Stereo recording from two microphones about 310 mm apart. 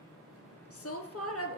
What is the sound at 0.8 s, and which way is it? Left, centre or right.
Speech, left.